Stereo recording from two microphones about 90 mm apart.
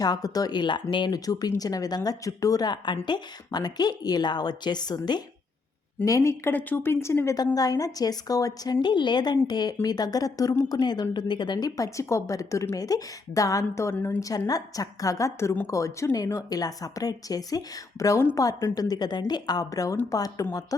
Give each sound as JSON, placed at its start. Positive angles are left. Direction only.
{"t": 0.0, "sound": "a woman's voice", "side_deg": 45}
{"t": 1.2, "sound": "a woman's voice", "side_deg": 45}
{"t": 6.1, "sound": "speech", "side_deg": 35}
{"t": 7.3, "sound": "a woman's voice", "side_deg": 45}
{"t": 13.9, "sound": "speech", "side_deg": 20}
{"t": 14.2, "sound": "a woman's voice", "side_deg": 40}